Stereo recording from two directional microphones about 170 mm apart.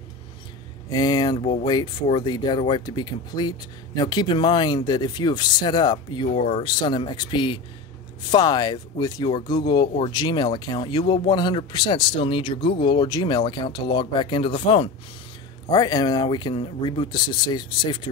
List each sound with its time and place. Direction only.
0.8 s speech: 25° left (ahead or behind)